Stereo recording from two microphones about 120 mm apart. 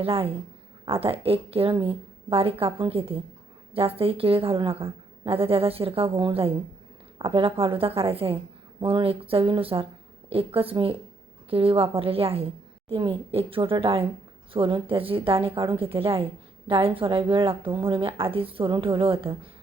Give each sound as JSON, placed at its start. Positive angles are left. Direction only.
{"t": 0.0, "sound": "a woman's voice", "side_deg": -50}